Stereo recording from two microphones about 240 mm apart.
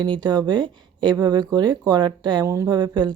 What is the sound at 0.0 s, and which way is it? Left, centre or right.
Speech, centre.